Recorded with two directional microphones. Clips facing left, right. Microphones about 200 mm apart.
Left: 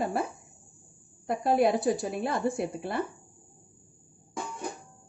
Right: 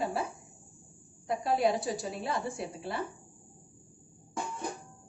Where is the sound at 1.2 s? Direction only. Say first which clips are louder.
Left 4 dB; 55° left (ahead or behind).